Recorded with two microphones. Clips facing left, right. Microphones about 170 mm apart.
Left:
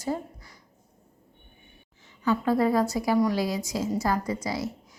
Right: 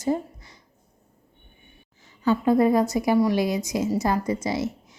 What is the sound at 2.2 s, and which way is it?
A woman's voice, 20° right (ahead or behind).